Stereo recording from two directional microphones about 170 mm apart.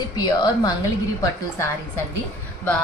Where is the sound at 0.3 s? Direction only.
25° left (ahead or behind).